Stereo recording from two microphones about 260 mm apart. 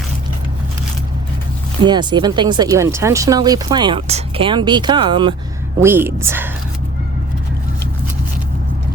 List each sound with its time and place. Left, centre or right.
1.8 s speech: centre